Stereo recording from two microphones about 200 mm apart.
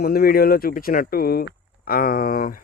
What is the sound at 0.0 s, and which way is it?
Speech, 50° left (ahead or behind).